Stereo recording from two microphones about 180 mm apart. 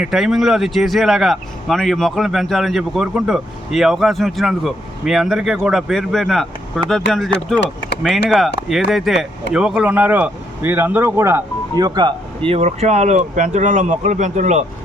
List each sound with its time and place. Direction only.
0.0 s speech: centre (ahead or behind)
8.7 s speech: centre (ahead or behind)
11.9 s speech: 30° right (ahead or behind)